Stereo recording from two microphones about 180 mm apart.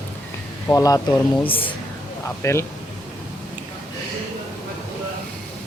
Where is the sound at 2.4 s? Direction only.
15° left (ahead or behind).